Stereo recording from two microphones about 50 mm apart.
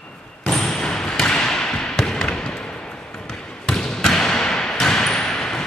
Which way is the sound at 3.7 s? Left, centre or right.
Centre.